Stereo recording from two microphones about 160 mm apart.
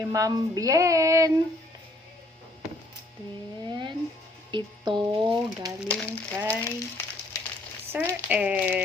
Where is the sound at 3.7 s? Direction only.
30° right (ahead or behind).